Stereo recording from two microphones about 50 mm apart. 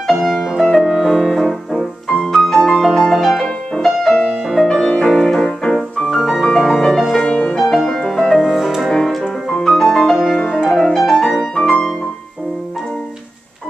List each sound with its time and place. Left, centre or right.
0.0 s music: centre
0.8 s music: centre
7.2 s music: centre
7.5 s music: centre
8.4 s music: centre
8.9 s music: centre